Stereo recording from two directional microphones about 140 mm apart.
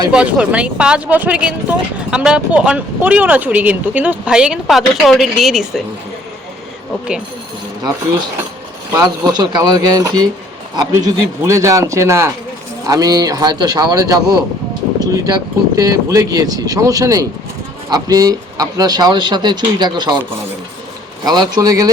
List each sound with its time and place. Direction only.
0.1 s speech: 10° right (ahead or behind)
8.9 s speech: 25° right (ahead or behind)
21.2 s speech: 30° right (ahead or behind)